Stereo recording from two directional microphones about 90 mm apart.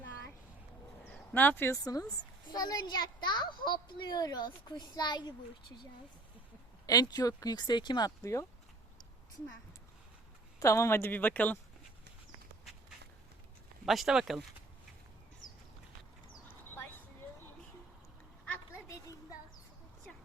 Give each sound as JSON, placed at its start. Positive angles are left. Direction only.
{"t": 1.3, "sound": "speech", "side_deg": 20}
{"t": 1.7, "sound": "a child's voice", "side_deg": 40}
{"t": 6.8, "sound": "speech", "side_deg": 45}
{"t": 8.2, "sound": "speech", "side_deg": 35}
{"t": 10.6, "sound": "speech", "side_deg": 35}
{"t": 13.8, "sound": "speech", "side_deg": 0}
{"t": 16.6, "sound": "a sound", "side_deg": 25}